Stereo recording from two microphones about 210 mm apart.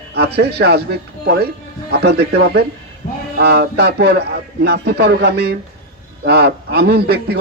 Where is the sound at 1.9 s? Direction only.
50° right (ahead or behind).